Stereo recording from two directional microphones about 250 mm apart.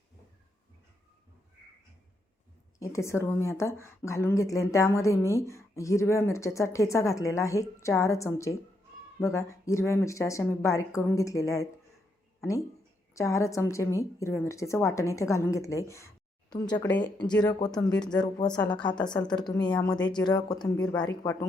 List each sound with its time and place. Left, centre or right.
2.7 s speech: centre